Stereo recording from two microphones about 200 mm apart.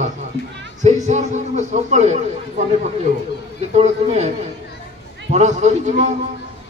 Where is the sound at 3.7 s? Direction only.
35° right (ahead or behind).